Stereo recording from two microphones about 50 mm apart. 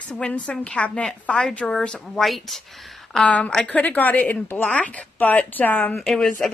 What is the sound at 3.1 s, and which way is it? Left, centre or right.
Speech, left.